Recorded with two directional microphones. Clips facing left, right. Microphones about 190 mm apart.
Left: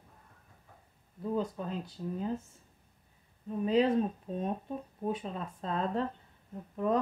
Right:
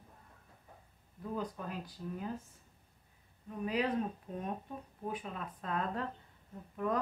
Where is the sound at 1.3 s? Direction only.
25° left (ahead or behind).